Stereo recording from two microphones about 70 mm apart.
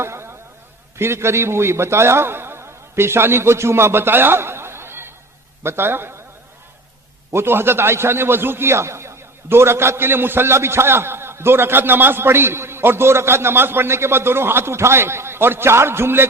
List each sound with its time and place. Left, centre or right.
0.0 s a sound: right
0.9 s a man's voice: right
7.3 s a man's voice: right